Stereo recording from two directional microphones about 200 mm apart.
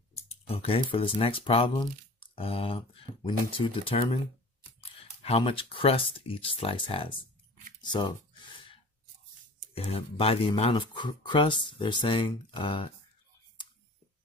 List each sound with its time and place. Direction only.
0.3 s speech: 30° left (ahead or behind)
5.2 s speech: 30° left (ahead or behind)
7.8 s a sound: 20° left (ahead or behind)
9.8 s speech: 30° left (ahead or behind)